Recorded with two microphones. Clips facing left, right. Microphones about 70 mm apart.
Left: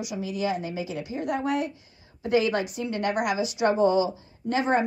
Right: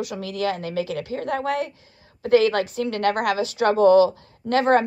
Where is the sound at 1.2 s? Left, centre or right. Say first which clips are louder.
Right 1 dB; right.